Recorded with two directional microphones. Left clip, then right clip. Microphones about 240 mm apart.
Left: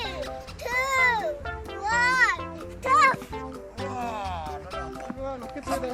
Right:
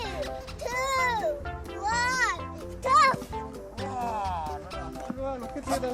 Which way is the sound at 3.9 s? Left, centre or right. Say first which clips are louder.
Right 2 dB; left.